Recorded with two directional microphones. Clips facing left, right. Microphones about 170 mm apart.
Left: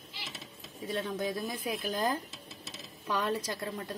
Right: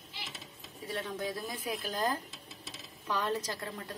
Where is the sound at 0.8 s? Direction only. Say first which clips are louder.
Left 3 dB; 20° left (ahead or behind).